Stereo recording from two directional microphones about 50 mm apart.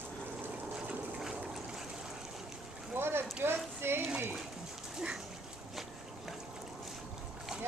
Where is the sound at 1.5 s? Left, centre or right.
Centre.